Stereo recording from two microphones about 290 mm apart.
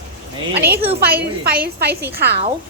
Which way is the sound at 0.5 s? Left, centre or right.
Right.